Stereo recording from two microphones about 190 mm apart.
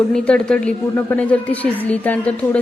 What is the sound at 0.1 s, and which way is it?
Speech, 5° left (ahead or behind).